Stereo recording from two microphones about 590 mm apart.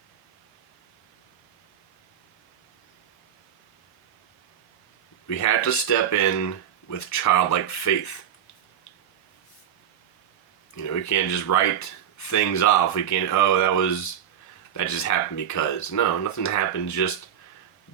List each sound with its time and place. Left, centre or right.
5.3 s speech: left
10.8 s speech: left